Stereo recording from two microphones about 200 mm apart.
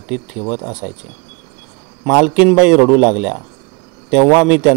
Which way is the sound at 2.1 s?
5° right (ahead or behind).